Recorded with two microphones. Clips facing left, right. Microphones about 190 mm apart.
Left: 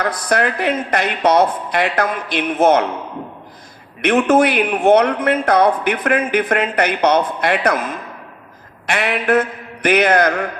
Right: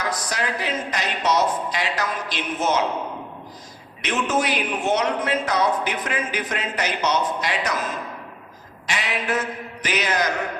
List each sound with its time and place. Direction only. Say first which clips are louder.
0.0 s a man's voice: left 8 dB; 55° left (ahead or behind)
4.0 s a man's voice: left 10 dB; 60° left (ahead or behind)